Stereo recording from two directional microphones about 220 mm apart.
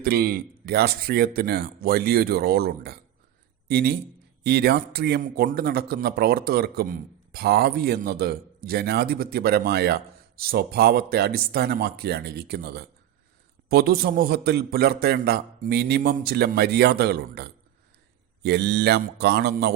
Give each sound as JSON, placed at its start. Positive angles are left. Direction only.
{"t": 0.0, "sound": "a man's voice", "side_deg": -45}